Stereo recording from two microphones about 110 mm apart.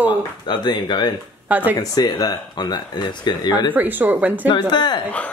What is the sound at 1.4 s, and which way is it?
Speech, 15° right (ahead or behind).